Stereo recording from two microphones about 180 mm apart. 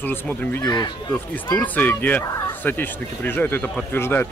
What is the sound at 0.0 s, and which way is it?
Speech, 10° left (ahead or behind).